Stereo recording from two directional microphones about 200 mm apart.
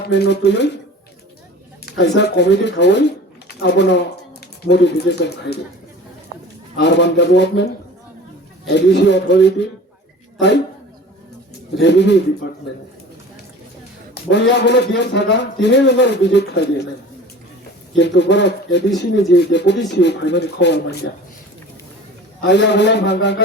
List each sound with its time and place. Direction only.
0.1 s a man's voice: 60° left (ahead or behind)
1.8 s a man's voice: 60° left (ahead or behind)
6.7 s a man's voice: 60° left (ahead or behind)
8.6 s a man's voice: 60° left (ahead or behind)
11.8 s a man's voice: 60° left (ahead or behind)
14.1 s a man's voice: 60° left (ahead or behind)
17.9 s a man's voice: 60° left (ahead or behind)
22.4 s a man's voice: 60° left (ahead or behind)